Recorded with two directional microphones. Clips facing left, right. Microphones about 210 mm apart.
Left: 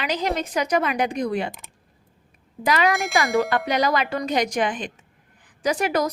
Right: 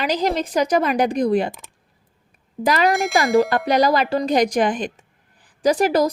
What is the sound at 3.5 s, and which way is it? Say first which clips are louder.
A woman's voice: right 4 dB; 35° right (ahead or behind).